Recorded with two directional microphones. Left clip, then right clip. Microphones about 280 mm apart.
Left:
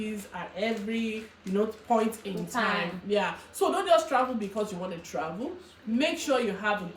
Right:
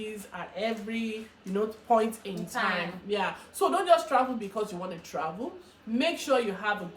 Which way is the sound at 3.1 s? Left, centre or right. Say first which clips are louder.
Left 2 dB; centre.